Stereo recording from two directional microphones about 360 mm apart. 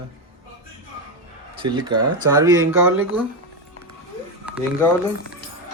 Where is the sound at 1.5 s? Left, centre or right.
Centre.